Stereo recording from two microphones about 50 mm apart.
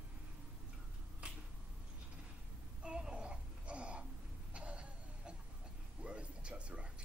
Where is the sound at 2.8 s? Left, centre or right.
Centre.